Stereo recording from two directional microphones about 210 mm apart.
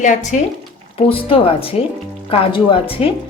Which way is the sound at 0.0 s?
35° left (ahead or behind).